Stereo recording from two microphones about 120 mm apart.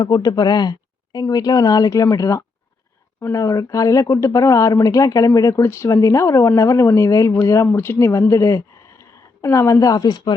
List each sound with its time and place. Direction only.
0.0 s a woman's voice: 35° left (ahead or behind)